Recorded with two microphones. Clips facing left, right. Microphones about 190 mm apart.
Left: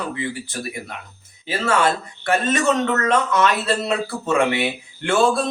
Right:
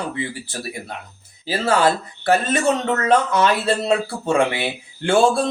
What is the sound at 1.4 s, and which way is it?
Speech, 35° right (ahead or behind).